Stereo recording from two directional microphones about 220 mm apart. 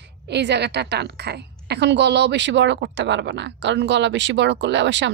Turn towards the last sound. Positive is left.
turn(degrees=-55)  # may be behind; listen again after turning